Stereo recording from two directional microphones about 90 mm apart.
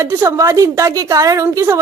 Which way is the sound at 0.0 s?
30° right (ahead or behind).